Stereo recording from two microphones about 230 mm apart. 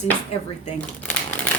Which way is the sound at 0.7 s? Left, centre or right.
Centre.